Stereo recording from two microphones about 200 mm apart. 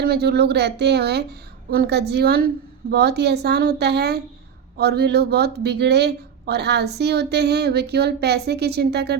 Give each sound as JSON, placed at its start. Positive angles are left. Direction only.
{"t": 0.0, "sound": "speech", "side_deg": -55}